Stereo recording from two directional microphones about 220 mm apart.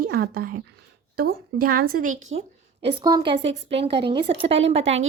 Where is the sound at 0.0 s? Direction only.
45° right (ahead or behind).